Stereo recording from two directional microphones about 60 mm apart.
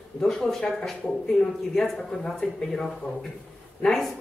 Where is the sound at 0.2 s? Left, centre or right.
Centre.